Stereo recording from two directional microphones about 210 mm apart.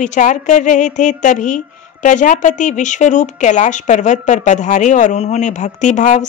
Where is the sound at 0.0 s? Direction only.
35° left (ahead or behind).